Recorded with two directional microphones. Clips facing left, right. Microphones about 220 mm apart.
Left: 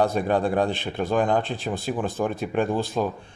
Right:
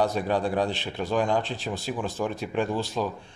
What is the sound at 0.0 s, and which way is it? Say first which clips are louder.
Speech: left 3 dB; 55° left (ahead or behind).